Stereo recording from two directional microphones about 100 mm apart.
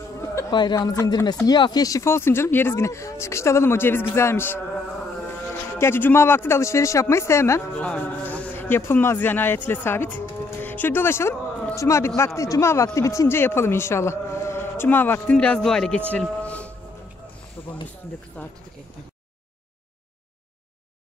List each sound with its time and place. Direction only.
0.5 s speech: 50° left (ahead or behind)
0.7 s speech: 35° left (ahead or behind)
5.8 s speech: 20° left (ahead or behind)
7.7 s speech: 10° left (ahead or behind)
15.3 s speech: 10° left (ahead or behind)
16.1 s a sound: 10° left (ahead or behind)
17.6 s speech: 15° left (ahead or behind)